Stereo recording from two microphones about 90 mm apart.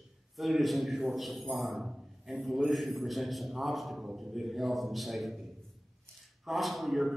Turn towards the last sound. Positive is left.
turn(degrees=0)  # may be behind; listen again after turning